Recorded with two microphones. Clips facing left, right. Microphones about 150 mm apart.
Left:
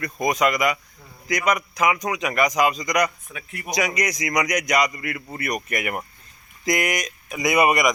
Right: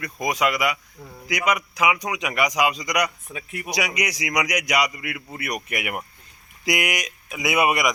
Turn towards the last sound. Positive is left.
turn(degrees=-5)  # may be behind; listen again after turning